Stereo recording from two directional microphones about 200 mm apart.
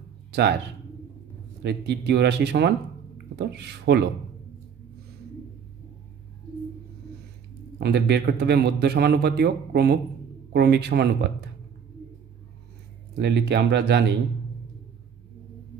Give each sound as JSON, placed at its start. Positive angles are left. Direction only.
{"t": 0.3, "sound": "a man's voice", "side_deg": -55}
{"t": 1.6, "sound": "speech", "side_deg": -55}
{"t": 7.8, "sound": "a man's voice", "side_deg": -55}
{"t": 13.2, "sound": "speech", "side_deg": -55}